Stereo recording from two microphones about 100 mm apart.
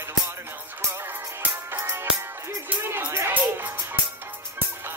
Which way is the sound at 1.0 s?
20° right (ahead or behind).